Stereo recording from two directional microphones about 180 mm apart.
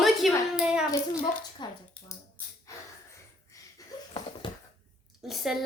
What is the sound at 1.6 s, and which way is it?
Speech, 25° left (ahead or behind).